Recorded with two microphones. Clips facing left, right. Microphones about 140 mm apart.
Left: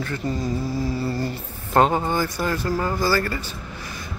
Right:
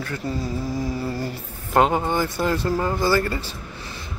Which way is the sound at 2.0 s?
20° right (ahead or behind).